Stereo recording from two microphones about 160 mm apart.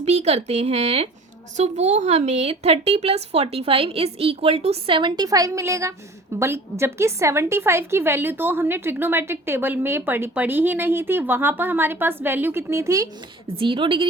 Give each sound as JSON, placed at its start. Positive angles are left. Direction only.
{"t": 0.0, "sound": "a woman's voice", "side_deg": -45}
{"t": 13.6, "sound": "a woman's voice", "side_deg": -30}